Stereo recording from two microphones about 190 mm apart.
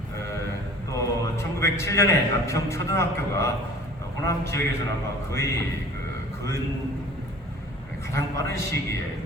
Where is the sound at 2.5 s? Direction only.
15° left (ahead or behind).